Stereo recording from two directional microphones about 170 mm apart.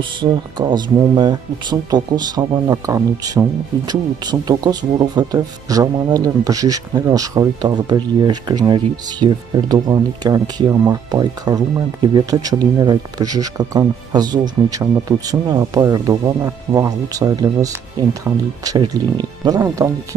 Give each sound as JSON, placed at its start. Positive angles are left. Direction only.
{"t": 0.2, "sound": "speech", "side_deg": -25}